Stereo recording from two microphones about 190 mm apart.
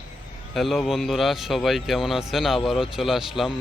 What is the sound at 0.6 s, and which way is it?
Speech, centre (ahead or behind).